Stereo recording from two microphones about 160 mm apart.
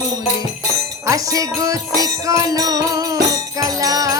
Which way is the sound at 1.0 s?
20° right (ahead or behind).